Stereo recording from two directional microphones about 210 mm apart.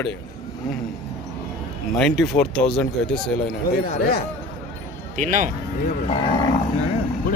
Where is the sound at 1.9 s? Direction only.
Centre (ahead or behind).